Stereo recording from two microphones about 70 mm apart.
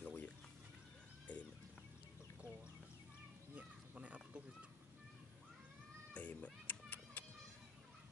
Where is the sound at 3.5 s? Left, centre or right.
Centre.